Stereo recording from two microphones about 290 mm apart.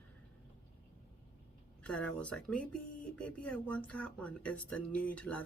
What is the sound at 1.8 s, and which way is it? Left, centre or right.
Speech, centre.